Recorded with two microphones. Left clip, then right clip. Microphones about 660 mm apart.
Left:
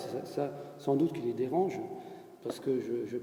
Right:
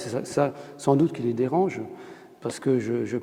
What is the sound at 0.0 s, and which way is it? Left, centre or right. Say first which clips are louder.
A man's voice: right 10 dB; right.